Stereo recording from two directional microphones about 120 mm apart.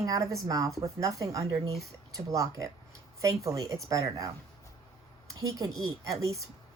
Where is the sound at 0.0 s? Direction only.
25° right (ahead or behind).